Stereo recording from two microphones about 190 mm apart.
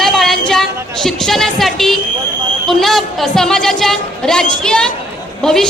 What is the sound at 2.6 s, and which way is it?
A woman's voice, centre (ahead or behind).